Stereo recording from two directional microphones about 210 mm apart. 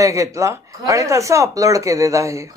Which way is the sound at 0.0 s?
15° right (ahead or behind).